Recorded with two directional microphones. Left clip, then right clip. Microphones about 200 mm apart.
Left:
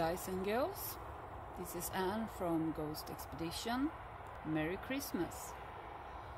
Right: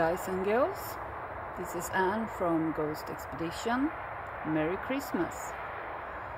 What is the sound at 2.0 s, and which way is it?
Speech, 5° right (ahead or behind).